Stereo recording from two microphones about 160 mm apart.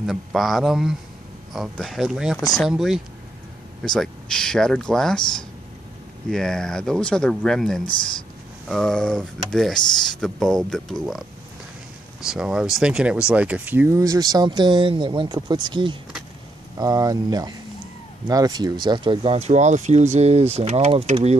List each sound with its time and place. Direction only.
0.0 s speech: centre (ahead or behind)
2.3 s speech: 20° left (ahead or behind)
2.6 s speech: centre (ahead or behind); by 21.4 s 40° right (ahead or behind)